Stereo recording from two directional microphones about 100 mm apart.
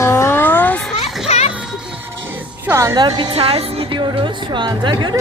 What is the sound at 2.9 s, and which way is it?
Speech, 45° right (ahead or behind).